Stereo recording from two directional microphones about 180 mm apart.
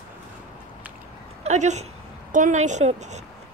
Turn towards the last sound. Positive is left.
turn(degrees=-40)  # may be behind; listen again after turning